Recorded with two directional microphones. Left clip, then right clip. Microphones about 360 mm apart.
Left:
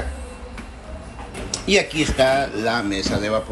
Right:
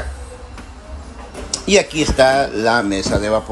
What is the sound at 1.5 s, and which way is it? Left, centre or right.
Speech, centre.